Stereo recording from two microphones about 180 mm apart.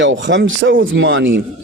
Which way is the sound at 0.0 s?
90° right.